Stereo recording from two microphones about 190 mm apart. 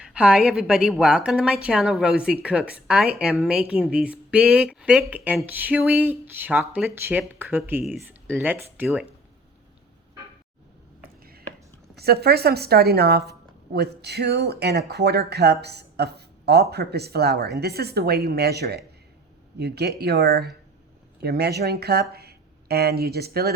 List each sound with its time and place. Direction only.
0.0 s a woman's voice: 5° right (ahead or behind)
8.4 s speech: 10° right (ahead or behind)
11.2 s a sound: 50° right (ahead or behind)
11.9 s speech: 55° right (ahead or behind)